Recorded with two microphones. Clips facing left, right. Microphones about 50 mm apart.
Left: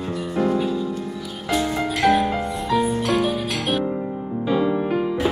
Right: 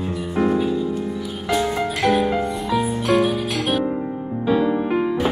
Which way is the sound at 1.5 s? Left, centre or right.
Centre.